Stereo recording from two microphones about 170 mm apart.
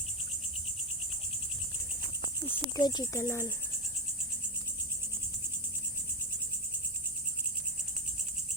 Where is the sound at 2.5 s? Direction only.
25° left (ahead or behind).